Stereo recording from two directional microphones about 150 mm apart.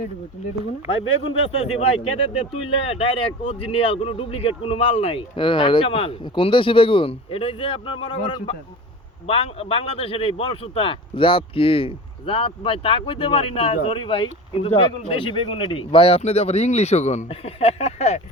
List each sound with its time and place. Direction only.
1.2 s speech: 40° left (ahead or behind)